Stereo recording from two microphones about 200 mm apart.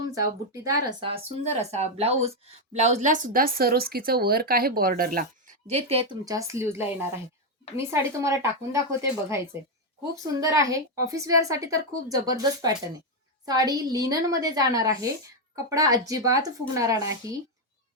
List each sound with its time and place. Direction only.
0.1 s speech: 15° right (ahead or behind); by 5.2 s 45° right (ahead or behind)
5.6 s speech: 30° right (ahead or behind)
6.2 s a woman's voice: 15° right (ahead or behind)
7.9 s a woman's voice: 15° right (ahead or behind)